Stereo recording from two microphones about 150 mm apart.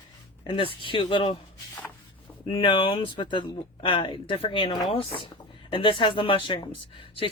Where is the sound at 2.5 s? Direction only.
35° left (ahead or behind).